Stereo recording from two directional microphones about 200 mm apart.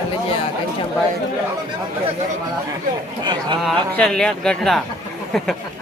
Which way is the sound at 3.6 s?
5° left (ahead or behind).